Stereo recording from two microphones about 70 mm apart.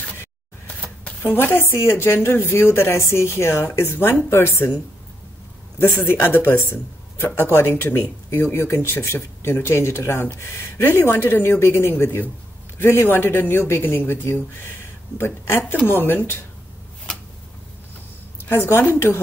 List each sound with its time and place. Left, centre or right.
1.0 s speech: left
5.8 s speech: left
18.4 s speech: left